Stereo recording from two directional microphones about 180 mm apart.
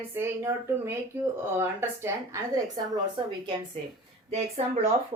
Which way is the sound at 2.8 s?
25° right (ahead or behind).